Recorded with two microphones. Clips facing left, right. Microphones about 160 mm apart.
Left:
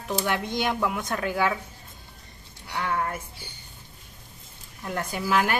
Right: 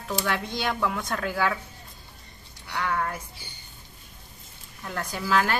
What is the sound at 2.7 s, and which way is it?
Speech, 20° left (ahead or behind).